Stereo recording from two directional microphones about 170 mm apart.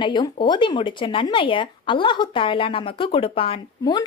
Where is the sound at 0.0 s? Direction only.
25° left (ahead or behind).